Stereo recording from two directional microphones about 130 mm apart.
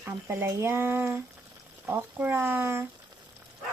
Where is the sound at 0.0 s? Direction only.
15° right (ahead or behind).